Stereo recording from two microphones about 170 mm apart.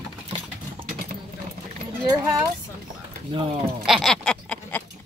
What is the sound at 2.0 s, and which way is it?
Speech, 20° right (ahead or behind).